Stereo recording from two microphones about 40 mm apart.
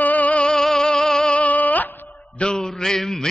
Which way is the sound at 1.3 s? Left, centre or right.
Left.